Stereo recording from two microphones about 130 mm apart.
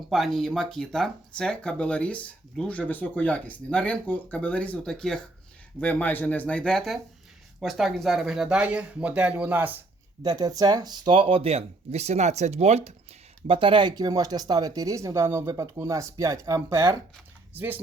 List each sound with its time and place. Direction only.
0.1 s speech: centre (ahead or behind)
10.2 s speech: 30° right (ahead or behind); by 12.9 s 55° right (ahead or behind)
13.5 s speech: 40° right (ahead or behind); by 17.8 s 15° right (ahead or behind)